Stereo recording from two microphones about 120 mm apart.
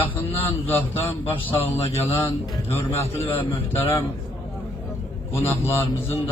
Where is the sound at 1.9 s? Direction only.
25° left (ahead or behind).